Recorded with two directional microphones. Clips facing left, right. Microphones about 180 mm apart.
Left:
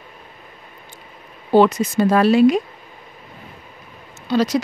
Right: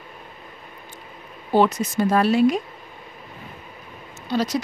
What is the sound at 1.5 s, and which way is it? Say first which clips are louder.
Speech: left 5 dB; 90° left.